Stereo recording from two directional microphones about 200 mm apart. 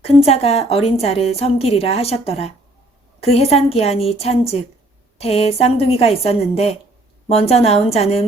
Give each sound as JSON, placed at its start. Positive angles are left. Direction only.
{"t": 0.0, "sound": "a woman's voice", "side_deg": 30}